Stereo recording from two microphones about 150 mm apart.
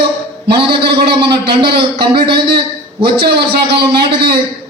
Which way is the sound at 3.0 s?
90° right.